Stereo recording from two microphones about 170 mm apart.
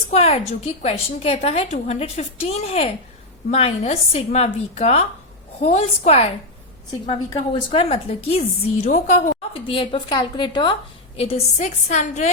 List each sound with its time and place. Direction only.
0.1 s a woman's voice: 35° left (ahead or behind)
9.5 s a woman's voice: 30° left (ahead or behind)
11.2 s a woman's voice: 40° left (ahead or behind)